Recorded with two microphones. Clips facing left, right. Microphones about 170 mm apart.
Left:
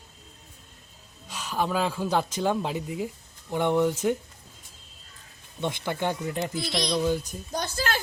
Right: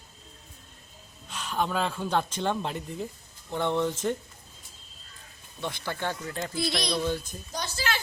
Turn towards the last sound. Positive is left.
turn(degrees=50)  # may be behind; listen again after turning